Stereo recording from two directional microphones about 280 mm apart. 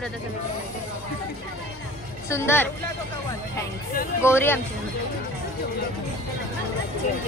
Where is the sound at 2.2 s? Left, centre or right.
Centre.